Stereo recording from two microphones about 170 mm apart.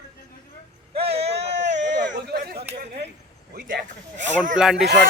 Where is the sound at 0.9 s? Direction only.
35° right (ahead or behind).